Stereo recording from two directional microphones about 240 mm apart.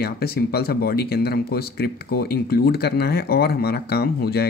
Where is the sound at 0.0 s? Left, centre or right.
Left.